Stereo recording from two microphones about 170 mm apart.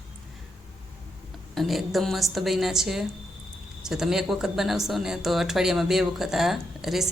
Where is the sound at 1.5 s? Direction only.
Centre (ahead or behind).